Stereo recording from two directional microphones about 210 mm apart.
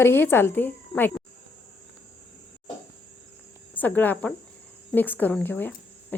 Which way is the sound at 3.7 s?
10° left (ahead or behind).